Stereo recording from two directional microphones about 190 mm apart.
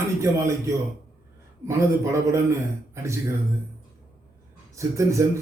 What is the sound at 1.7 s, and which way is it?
Speech, 15° right (ahead or behind).